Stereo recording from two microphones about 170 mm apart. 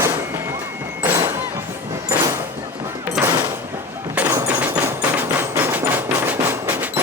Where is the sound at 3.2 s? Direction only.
15° right (ahead or behind).